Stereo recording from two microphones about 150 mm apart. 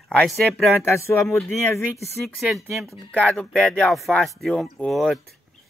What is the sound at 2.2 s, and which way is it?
Speech, centre (ahead or behind).